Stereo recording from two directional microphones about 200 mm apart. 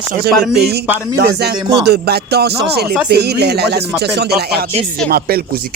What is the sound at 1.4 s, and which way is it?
Speech, 55° right (ahead or behind).